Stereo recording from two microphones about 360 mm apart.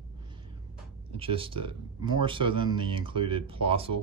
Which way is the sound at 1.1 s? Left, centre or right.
Centre.